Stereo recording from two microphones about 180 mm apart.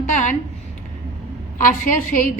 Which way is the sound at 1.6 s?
50° left (ahead or behind).